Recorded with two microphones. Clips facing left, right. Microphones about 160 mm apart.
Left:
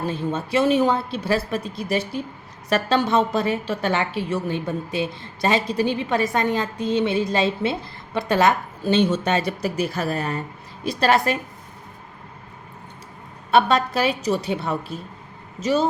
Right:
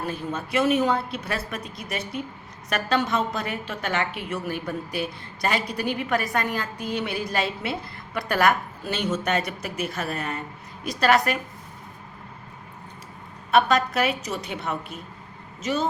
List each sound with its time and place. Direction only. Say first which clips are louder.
0.0 s a woman's voice: left 4 dB; 30° left (ahead or behind)
13.5 s a woman's voice: left 2 dB; 30° left (ahead or behind)